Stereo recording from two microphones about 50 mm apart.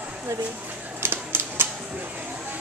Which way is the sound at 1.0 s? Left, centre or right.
Right.